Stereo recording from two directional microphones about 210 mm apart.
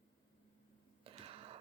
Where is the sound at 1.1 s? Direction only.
25° right (ahead or behind).